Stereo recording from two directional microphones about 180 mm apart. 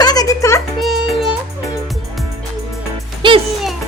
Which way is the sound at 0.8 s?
Centre (ahead or behind).